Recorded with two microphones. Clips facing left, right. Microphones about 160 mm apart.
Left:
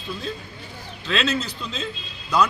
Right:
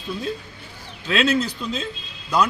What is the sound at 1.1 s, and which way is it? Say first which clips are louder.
Speech: right 4 dB; 10° right (ahead or behind).